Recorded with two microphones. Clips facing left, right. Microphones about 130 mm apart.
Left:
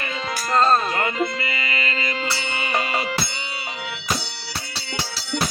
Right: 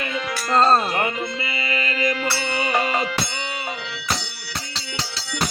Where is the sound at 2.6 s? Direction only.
45° right (ahead or behind).